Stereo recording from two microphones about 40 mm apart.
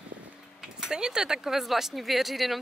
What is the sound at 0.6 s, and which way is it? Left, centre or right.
Speech, centre.